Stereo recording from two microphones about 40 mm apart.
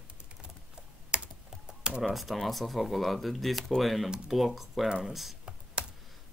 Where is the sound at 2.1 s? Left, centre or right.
Centre.